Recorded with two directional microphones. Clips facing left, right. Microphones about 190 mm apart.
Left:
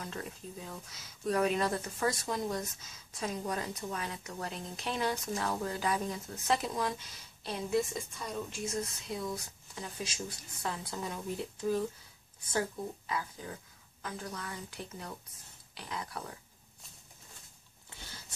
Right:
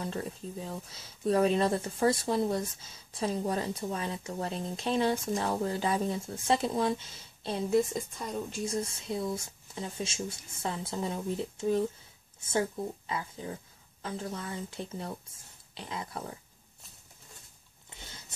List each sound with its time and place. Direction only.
0.0 s speech: 30° right (ahead or behind)
8.6 s speech: 30° right (ahead or behind)
17.8 s a sound: 20° right (ahead or behind)